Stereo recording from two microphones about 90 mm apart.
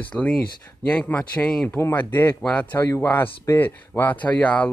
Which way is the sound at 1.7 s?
25° left (ahead or behind).